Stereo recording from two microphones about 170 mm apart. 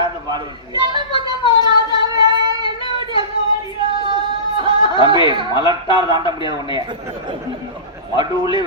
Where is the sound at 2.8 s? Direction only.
30° left (ahead or behind).